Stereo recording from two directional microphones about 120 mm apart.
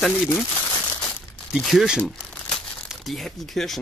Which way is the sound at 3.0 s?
5° left (ahead or behind).